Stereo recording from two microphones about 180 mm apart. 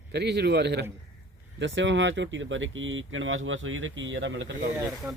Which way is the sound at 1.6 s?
90° right.